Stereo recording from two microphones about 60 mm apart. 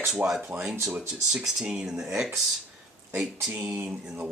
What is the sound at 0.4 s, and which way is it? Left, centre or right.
Speech, right.